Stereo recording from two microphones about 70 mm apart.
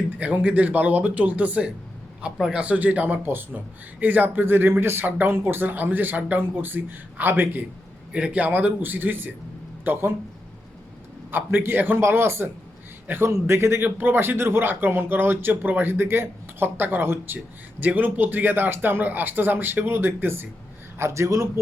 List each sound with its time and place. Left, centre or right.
0.2 s speech: right
3.2 s a man's voice: right
8.1 s speech: centre; by 10.1 s right
11.3 s a man's voice: right